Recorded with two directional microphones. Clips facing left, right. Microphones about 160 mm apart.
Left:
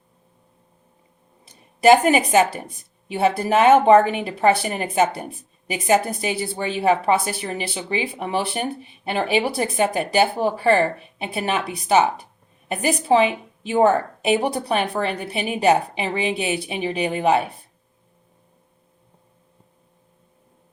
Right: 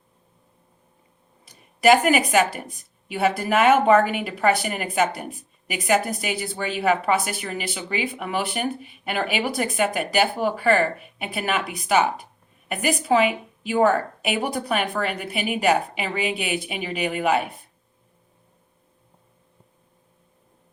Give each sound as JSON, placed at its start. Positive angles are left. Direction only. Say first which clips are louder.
{"t": 1.5, "sound": "a woman's voice", "louder": "left 3 dB", "side_deg": 25}